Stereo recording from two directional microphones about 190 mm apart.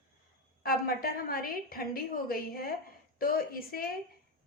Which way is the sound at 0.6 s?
50° left (ahead or behind).